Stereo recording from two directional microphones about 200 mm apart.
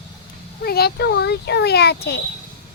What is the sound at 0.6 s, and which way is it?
A child's voice, 50° left (ahead or behind).